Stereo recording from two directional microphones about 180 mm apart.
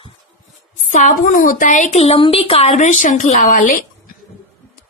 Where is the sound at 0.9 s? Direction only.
45° left (ahead or behind).